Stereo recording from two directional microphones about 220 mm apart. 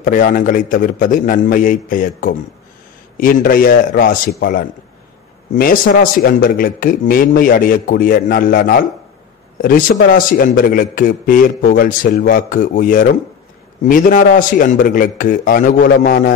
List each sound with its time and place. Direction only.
0.0 s a man's voice: 40° left (ahead or behind)